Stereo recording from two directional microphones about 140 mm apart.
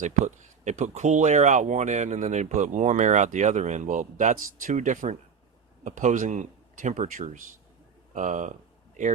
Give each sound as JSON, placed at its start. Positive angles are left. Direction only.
{"t": 0.0, "sound": "speech", "side_deg": -60}